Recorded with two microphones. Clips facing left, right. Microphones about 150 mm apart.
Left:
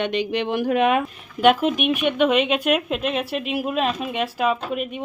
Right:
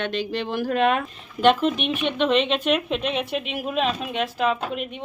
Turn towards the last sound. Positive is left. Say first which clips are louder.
# left 2 dB
turn(degrees=5)  # may be behind; listen again after turning